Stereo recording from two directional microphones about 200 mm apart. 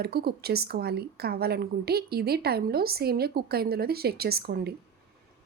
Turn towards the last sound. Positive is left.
turn(degrees=-50)  # may be behind; listen again after turning